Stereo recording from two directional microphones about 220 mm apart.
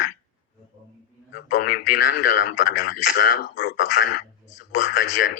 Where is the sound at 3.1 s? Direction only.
55° left (ahead or behind).